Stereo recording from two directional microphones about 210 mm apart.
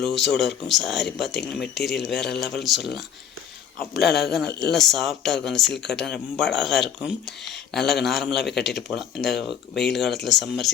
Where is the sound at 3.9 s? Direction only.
50° left (ahead or behind).